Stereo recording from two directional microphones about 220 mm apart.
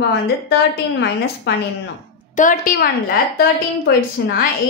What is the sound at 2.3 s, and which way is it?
Speech, 40° left (ahead or behind).